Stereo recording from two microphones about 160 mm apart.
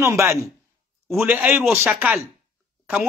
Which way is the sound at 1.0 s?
5° right (ahead or behind).